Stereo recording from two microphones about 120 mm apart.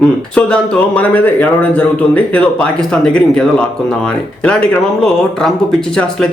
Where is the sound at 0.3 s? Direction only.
10° left (ahead or behind).